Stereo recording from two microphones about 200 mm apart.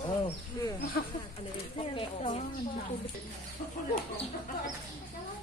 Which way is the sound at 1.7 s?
30° left (ahead or behind).